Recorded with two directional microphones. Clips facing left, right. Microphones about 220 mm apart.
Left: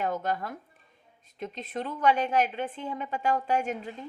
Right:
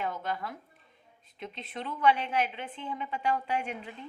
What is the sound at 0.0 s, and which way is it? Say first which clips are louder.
A woman's voice: left 4 dB; 45° left (ahead or behind).